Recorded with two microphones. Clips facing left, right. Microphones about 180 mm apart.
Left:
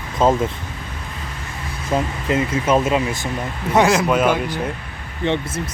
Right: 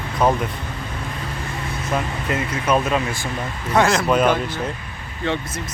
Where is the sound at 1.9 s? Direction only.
25° left (ahead or behind).